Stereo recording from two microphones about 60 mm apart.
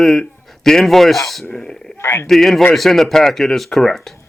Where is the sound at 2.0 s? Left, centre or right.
Left.